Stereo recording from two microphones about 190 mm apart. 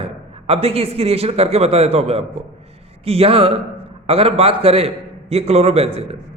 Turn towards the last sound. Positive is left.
turn(degrees=-30)  # may be behind; listen again after turning